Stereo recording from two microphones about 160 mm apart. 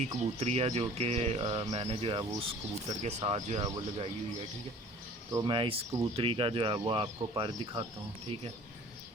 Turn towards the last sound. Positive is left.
turn(degrees=-30)  # may be behind; listen again after turning